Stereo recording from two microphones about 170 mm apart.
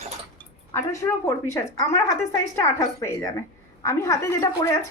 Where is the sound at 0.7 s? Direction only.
15° left (ahead or behind).